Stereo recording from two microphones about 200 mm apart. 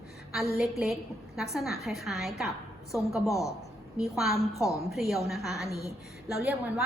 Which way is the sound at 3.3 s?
15° left (ahead or behind).